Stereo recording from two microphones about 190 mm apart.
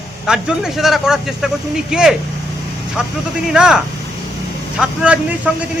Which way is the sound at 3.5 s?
5° right (ahead or behind).